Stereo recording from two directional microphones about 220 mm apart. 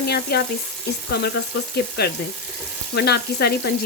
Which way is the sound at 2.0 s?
45° left (ahead or behind).